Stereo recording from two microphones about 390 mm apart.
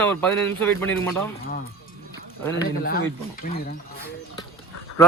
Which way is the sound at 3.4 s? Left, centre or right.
Left.